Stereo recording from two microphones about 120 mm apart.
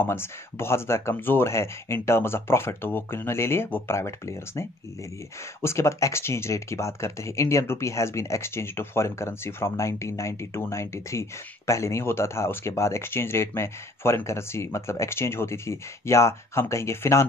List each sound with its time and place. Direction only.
0.0 s speech: 20° left (ahead or behind)